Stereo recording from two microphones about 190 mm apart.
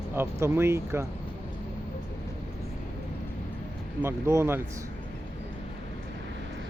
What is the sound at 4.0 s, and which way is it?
Speech, 15° right (ahead or behind).